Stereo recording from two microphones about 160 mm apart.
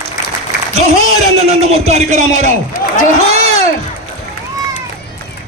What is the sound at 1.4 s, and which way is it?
A man's voice, 45° right (ahead or behind).